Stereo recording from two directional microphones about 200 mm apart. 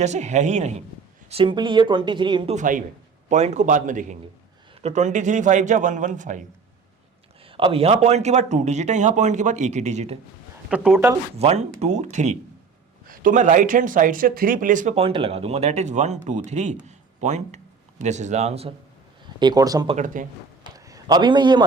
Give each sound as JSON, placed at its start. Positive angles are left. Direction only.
{"t": 0.0, "sound": "speech", "side_deg": -35}
{"t": 2.6, "sound": "speech", "side_deg": -40}
{"t": 7.5, "sound": "speech", "side_deg": -30}
{"t": 10.7, "sound": "speech", "side_deg": -5}
{"t": 11.3, "sound": "speech", "side_deg": -30}
{"t": 19.4, "sound": "speech", "side_deg": -20}
{"t": 20.2, "sound": "speech", "side_deg": -40}
{"t": 20.7, "sound": "a sound", "side_deg": -15}